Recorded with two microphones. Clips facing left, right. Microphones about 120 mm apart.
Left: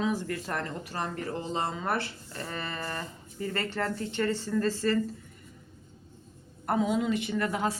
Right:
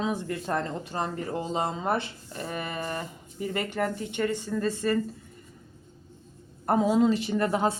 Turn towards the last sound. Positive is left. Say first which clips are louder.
# right 4 dB
turn(degrees=-30)  # may be behind; listen again after turning